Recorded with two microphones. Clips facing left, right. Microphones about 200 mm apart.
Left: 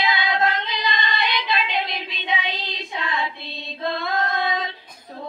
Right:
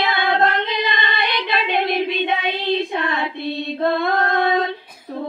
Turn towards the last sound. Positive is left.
turn(degrees=-55)  # may be behind; listen again after turning